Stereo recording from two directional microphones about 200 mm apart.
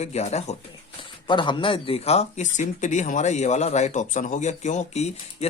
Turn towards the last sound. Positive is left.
turn(degrees=35)  # may be behind; listen again after turning